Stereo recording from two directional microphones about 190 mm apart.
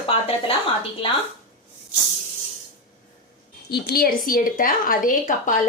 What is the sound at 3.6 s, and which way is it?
A woman's voice, 60° left (ahead or behind).